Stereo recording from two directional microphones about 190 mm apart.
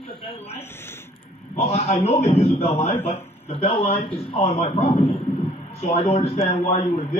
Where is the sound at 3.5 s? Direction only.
30° left (ahead or behind).